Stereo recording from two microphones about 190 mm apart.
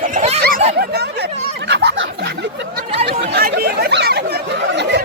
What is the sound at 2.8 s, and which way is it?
Chatter, 30° right (ahead or behind).